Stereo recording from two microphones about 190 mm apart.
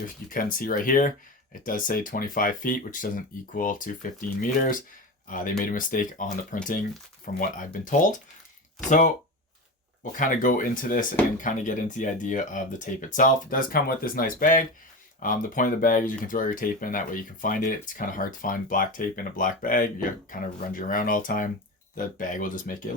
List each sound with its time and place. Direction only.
0.2 s speech: 55° left (ahead or behind)
10.0 s speech: 45° left (ahead or behind)